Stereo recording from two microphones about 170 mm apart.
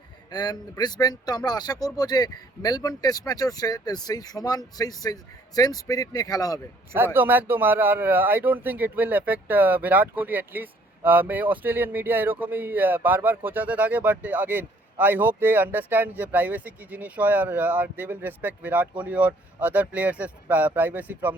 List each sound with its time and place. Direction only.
0.3 s speech: 25° left (ahead or behind)
6.9 s a man's voice: 10° right (ahead or behind)